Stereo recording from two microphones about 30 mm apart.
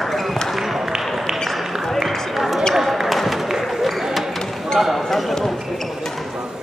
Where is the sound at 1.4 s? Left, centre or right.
Centre.